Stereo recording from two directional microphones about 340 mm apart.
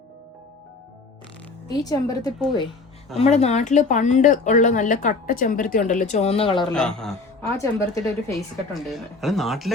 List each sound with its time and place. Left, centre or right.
1.6 s a woman's voice: centre
3.2 s speech: centre
6.7 s a woman's voice: centre